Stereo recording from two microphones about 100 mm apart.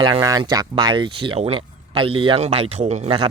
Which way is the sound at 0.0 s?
50° right (ahead or behind).